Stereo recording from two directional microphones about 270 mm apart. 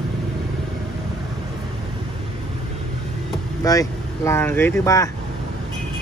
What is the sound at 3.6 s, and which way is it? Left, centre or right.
Speech, centre.